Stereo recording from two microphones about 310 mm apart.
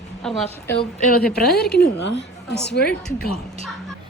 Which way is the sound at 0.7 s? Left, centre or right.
Left.